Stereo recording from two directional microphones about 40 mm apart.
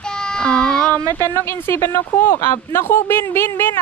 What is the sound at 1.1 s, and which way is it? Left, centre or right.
Speech, left.